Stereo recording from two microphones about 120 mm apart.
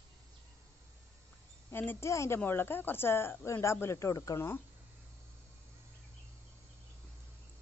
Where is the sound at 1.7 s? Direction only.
20° left (ahead or behind).